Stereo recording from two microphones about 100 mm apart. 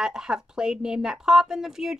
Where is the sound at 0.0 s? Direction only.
5° right (ahead or behind).